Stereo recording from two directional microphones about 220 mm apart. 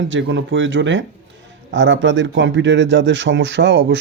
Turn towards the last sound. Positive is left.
turn(degrees=-55)  # may be behind; listen again after turning